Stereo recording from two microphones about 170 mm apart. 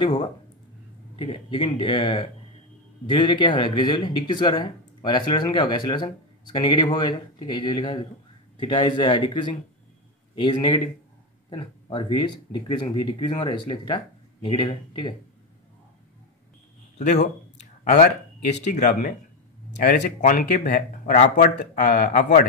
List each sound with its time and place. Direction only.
0.0 s speech: 30° left (ahead or behind)
17.0 s speech: 45° left (ahead or behind)
17.8 s speech: 60° left (ahead or behind)
20.2 s speech: 50° left (ahead or behind)